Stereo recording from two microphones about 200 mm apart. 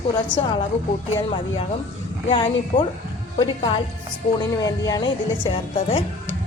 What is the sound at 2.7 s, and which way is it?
A woman's voice, 30° left (ahead or behind).